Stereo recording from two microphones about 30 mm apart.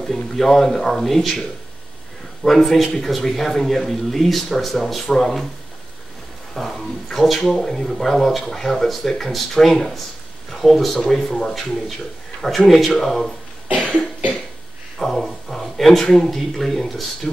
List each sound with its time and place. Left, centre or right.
0.0 s speech: centre
2.4 s speech: centre
6.5 s speech: centre
13.7 s cough: right
15.0 s speech: centre